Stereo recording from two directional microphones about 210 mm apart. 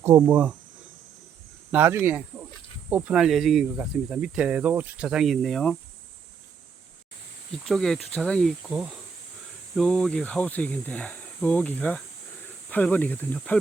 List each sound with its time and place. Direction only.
0.0 s speech: 10° right (ahead or behind)
1.7 s speech: 10° right (ahead or behind)
7.7 s speech: centre (ahead or behind)